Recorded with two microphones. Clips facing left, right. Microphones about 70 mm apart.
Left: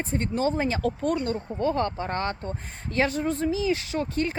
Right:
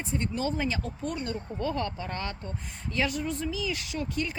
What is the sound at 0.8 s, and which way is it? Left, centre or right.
Speech, left.